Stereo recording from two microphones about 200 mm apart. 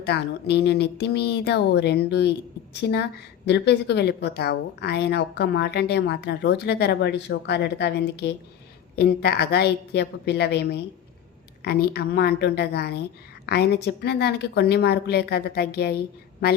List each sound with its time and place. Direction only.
0.0 s a woman's voice: 55° left (ahead or behind)